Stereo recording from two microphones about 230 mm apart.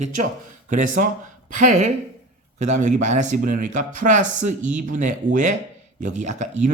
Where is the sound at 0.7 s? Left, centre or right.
Right.